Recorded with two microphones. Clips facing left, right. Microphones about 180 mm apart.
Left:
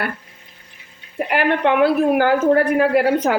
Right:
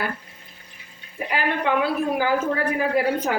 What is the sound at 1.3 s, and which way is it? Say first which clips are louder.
A woman's voice: left 6 dB; 65° left (ahead or behind).